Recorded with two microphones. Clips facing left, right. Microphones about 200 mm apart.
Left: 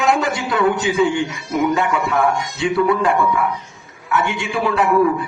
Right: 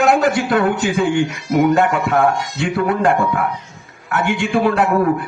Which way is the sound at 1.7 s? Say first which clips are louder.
Right 3 dB; 45° right (ahead or behind).